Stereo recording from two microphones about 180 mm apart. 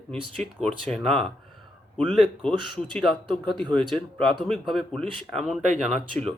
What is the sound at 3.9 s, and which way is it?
Speech, centre (ahead or behind).